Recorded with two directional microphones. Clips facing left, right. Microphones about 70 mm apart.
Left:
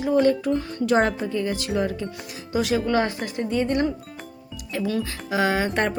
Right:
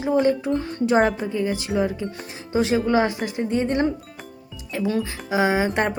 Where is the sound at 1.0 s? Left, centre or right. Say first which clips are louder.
Right 2 dB; centre.